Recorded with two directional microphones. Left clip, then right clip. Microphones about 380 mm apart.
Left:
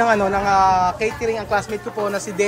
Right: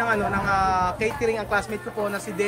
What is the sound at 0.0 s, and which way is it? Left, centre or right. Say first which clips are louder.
Speech: left 6 dB; centre.